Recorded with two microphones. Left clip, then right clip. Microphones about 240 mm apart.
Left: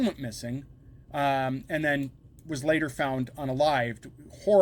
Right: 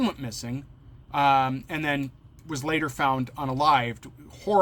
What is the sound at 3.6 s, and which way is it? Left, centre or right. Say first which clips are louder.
Speech: right 3 dB; centre.